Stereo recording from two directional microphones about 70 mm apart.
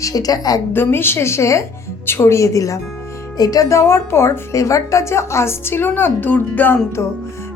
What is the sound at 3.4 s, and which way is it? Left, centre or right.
A woman's voice, left.